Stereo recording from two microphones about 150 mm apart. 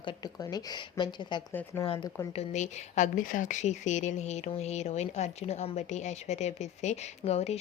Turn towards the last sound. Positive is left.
turn(degrees=45)  # may be behind; listen again after turning